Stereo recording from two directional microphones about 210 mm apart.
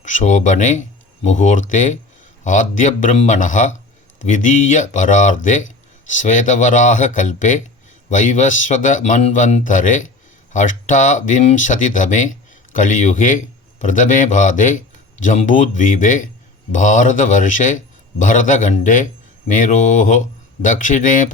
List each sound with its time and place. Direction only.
0.0 s speech: 35° left (ahead or behind)